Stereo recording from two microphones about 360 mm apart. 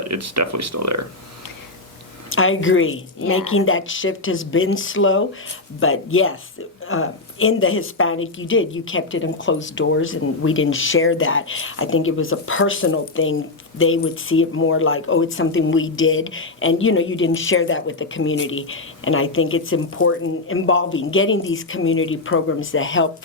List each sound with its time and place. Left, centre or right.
0.1 s speech: right
2.3 s a woman's voice: left